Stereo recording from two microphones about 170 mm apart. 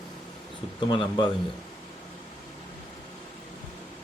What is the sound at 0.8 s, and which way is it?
Speech, 25° left (ahead or behind).